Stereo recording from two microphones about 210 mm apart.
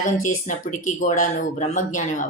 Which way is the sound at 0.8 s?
35° left (ahead or behind).